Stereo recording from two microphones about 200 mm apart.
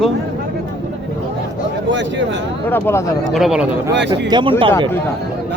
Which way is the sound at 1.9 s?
65° right (ahead or behind).